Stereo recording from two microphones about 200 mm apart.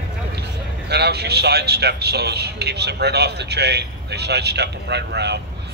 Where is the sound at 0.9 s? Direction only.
55° right (ahead or behind).